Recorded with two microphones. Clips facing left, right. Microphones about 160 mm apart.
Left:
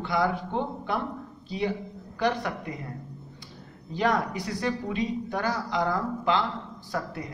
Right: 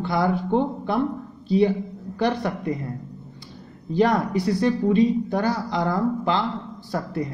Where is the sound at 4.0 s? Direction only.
35° right (ahead or behind).